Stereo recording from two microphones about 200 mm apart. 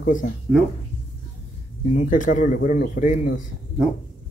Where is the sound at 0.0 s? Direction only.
40° left (ahead or behind).